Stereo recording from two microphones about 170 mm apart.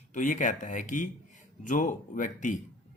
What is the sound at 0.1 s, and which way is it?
Speech, 50° left (ahead or behind).